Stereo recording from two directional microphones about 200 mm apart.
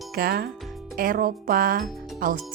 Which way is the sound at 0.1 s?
50° right (ahead or behind).